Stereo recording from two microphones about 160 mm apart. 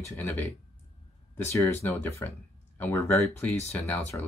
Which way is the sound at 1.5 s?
15° left (ahead or behind).